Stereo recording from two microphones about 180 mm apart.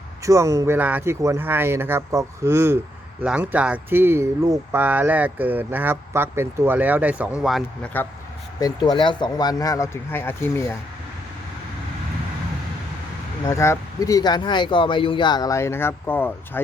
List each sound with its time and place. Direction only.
0.2 s speech: 15° right (ahead or behind); by 7.9 s centre (ahead or behind)
8.6 s speech: 25° left (ahead or behind)
13.4 s speech: 15° left (ahead or behind)